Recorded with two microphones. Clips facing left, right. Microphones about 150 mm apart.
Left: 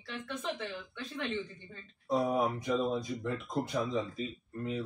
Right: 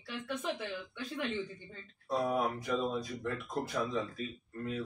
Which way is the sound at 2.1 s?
20° left (ahead or behind).